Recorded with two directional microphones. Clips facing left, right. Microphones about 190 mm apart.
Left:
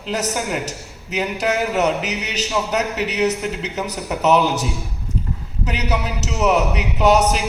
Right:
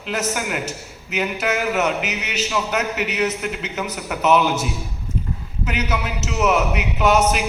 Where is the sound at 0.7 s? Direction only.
35° left (ahead or behind).